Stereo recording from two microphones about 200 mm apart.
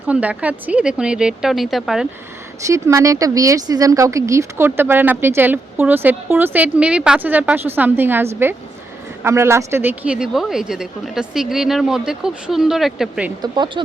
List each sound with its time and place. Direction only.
0.1 s a woman's voice: 5° right (ahead or behind)
2.6 s a woman's voice: 15° right (ahead or behind)
13.4 s speech: 20° right (ahead or behind)